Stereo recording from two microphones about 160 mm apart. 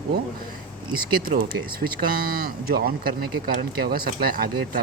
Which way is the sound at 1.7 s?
65° right (ahead or behind).